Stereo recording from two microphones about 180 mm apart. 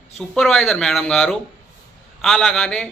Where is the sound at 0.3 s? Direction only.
5° left (ahead or behind).